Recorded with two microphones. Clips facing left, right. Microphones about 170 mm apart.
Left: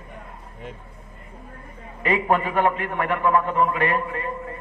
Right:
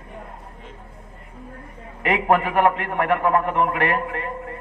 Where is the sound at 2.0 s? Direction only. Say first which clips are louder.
Right 2 dB; 75° right (ahead or behind).